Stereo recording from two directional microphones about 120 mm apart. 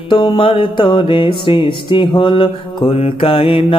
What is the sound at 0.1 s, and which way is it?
Music, 45° left (ahead or behind).